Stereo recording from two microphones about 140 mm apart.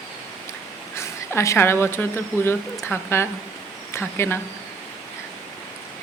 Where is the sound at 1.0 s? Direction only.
20° left (ahead or behind).